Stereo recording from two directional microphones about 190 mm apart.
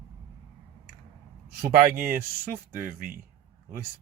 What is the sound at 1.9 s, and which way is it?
Speech, 50° right (ahead or behind).